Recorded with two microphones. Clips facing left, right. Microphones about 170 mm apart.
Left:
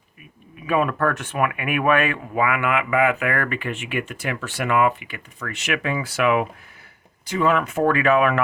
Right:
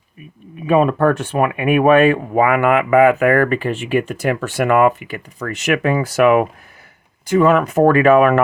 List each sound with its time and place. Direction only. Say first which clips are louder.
0.7 s speech: right 7 dB; 25° right (ahead or behind)